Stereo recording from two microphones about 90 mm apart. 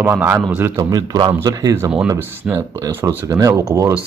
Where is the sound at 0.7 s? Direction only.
40° right (ahead or behind).